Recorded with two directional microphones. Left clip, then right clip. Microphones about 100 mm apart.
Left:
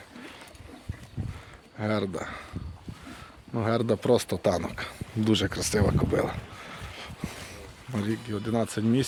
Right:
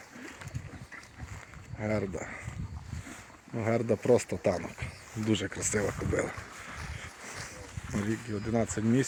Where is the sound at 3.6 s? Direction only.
40° left (ahead or behind).